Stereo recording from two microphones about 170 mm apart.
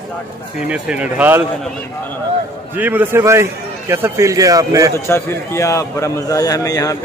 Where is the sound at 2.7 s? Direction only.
10° right (ahead or behind).